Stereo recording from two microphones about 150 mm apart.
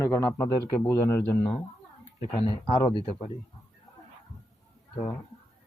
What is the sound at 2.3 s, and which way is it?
Speech, 40° left (ahead or behind).